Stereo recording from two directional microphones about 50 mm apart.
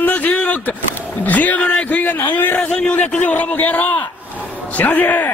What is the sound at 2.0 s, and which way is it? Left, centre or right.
Speech, left.